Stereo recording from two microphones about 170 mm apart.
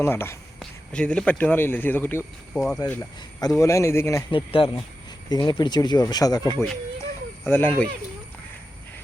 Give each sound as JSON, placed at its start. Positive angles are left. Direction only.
{"t": 0.0, "sound": "speech", "side_deg": 15}
{"t": 4.3, "sound": "speech", "side_deg": 30}
{"t": 7.0, "sound": "a sound", "side_deg": 10}